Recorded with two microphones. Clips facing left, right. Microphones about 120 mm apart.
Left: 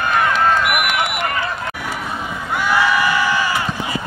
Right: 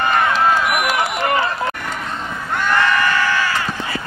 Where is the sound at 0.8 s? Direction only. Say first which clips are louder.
Right 2 dB; 35° right (ahead or behind).